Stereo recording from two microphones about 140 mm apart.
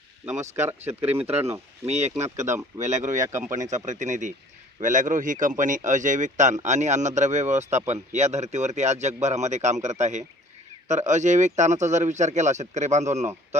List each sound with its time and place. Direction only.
0.5 s speech: 20° right (ahead or behind)
1.9 s speech: 55° right (ahead or behind)